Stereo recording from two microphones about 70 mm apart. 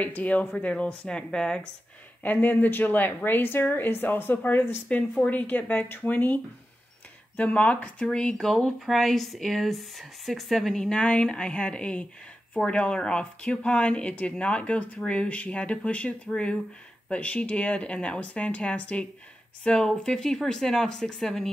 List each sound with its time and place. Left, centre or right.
0.0 s speech: left
2.2 s a woman's voice: left
4.8 s a woman's voice: centre
10.9 s speech: centre